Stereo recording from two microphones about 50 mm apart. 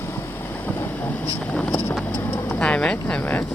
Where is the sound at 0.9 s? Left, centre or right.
Left.